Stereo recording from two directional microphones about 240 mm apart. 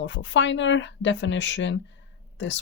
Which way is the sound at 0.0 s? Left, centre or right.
Left.